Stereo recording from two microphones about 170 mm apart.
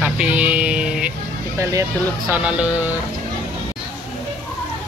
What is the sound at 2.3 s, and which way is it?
Speech, 5° right (ahead or behind).